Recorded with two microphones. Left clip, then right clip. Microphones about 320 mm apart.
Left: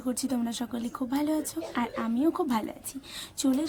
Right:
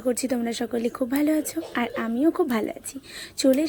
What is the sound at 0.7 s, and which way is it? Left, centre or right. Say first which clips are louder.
Speech: right 7 dB; centre.